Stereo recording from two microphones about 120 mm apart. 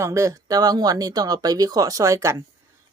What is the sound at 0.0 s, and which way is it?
Speech, 25° right (ahead or behind).